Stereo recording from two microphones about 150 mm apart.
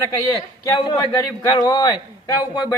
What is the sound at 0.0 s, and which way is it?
A man's voice, 20° left (ahead or behind).